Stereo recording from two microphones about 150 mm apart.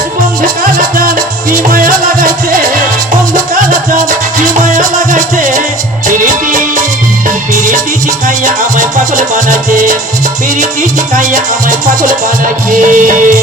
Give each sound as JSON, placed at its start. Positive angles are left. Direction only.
{"t": 0.4, "sound": "music", "side_deg": -65}
{"t": 11.1, "sound": "music", "side_deg": -60}